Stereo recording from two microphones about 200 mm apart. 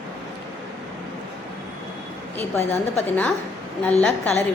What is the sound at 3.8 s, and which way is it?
Speech, 5° left (ahead or behind).